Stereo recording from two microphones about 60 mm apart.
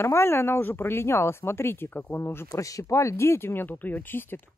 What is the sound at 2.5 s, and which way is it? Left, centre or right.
Speech, left.